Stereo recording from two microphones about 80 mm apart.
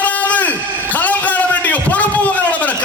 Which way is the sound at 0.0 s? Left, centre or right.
Centre.